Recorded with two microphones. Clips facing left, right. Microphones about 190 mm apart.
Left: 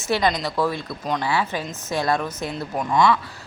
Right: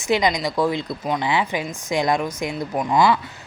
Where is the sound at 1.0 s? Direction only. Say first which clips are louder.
Even; 10° right (ahead or behind).